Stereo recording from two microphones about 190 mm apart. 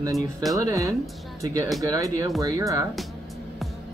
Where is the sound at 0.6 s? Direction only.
15° right (ahead or behind).